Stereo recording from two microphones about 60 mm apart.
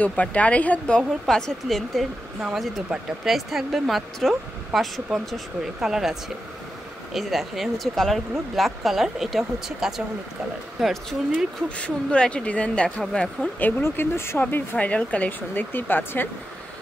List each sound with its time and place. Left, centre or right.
0.1 s speech: left
1.2 s speech: centre
7.2 s speech: centre
10.8 s speech: centre
11.7 s speech: centre
13.6 s speech: left
13.8 s speech: left
14.5 s speech: left
14.9 s speech: left